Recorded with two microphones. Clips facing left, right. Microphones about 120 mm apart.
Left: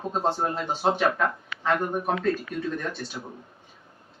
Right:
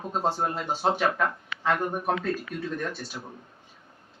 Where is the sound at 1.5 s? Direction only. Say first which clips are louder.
Right 1 dB; 25° right (ahead or behind).